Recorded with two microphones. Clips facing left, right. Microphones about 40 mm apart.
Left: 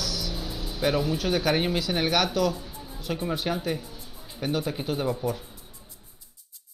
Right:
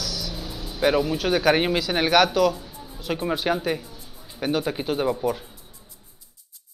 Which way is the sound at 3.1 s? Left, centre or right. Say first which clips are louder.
Right 4 dB; right.